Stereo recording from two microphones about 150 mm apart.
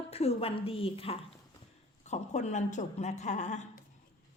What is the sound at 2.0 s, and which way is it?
A woman's voice, 50° left (ahead or behind).